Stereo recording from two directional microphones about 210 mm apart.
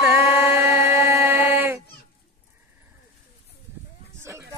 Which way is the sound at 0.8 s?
15° right (ahead or behind).